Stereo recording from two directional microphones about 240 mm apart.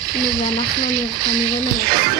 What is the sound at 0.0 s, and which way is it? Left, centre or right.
Speech, centre.